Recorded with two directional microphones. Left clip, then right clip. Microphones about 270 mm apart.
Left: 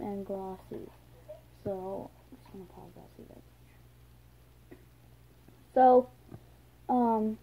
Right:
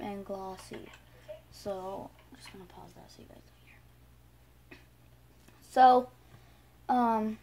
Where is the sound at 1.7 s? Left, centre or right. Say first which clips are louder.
Left 1 dB; centre.